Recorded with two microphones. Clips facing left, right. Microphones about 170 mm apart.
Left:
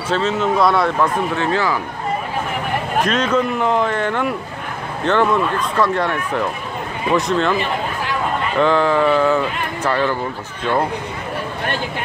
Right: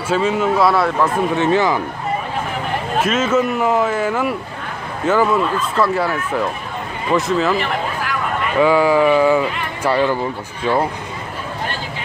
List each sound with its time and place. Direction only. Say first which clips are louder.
0.1 s speech: right 1 dB; 10° right (ahead or behind)
1.3 s speech: right 3 dB; 20° right (ahead or behind)
3.0 s speech: right 1 dB; 5° right (ahead or behind)
8.5 s speech: right 2 dB; 10° right (ahead or behind)